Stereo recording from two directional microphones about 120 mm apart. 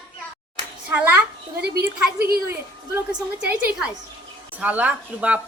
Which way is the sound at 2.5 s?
20° right (ahead or behind).